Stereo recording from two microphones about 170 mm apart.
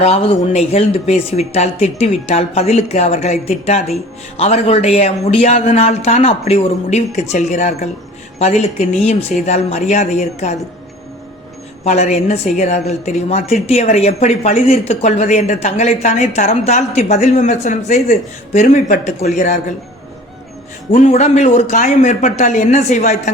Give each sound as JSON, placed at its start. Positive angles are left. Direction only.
{"t": 0.0, "sound": "a woman's voice", "side_deg": 40}
{"t": 9.5, "sound": "a woman's voice", "side_deg": 40}
{"t": 11.8, "sound": "a woman's voice", "side_deg": 40}
{"t": 20.9, "sound": "speech", "side_deg": 45}